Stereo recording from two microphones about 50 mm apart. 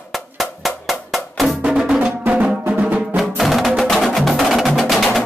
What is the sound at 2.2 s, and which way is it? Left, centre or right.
Music, right.